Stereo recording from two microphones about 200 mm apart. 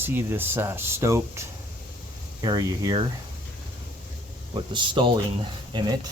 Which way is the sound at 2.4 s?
15° right (ahead or behind).